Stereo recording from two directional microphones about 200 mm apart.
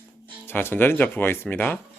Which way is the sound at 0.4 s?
10° left (ahead or behind).